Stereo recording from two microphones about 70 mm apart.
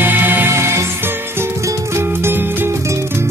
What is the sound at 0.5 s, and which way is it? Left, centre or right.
Music, right.